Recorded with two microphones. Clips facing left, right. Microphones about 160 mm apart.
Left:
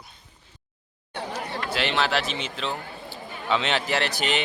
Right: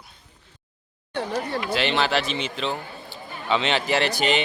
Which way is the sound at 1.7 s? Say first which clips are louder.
Right 1 dB; centre (ahead or behind).